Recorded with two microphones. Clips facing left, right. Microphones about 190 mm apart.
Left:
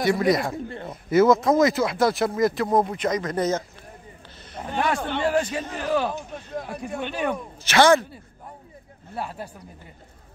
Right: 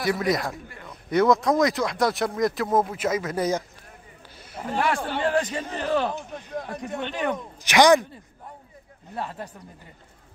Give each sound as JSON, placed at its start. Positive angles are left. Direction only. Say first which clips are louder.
{"t": 0.0, "sound": "a man's voice", "louder": "left 3 dB", "side_deg": 0}
{"t": 5.2, "sound": "speech", "louder": "left 1 dB", "side_deg": 10}
{"t": 7.6, "sound": "speech", "louder": "even", "side_deg": -15}
{"t": 9.1, "sound": "speech", "louder": "even", "side_deg": 10}